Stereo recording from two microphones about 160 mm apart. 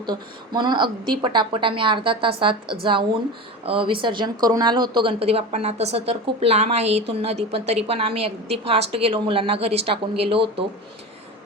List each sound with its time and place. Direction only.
0.0 s a woman's voice: 30° right (ahead or behind)